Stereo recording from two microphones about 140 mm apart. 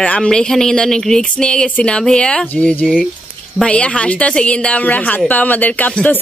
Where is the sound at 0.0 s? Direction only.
10° left (ahead or behind).